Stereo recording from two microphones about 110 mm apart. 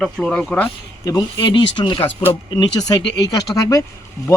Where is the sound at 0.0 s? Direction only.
10° left (ahead or behind).